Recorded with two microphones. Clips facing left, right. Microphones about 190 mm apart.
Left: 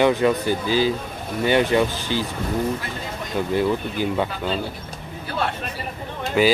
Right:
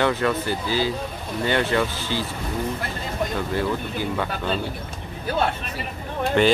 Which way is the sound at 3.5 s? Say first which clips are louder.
Left 3 dB; 15° left (ahead or behind).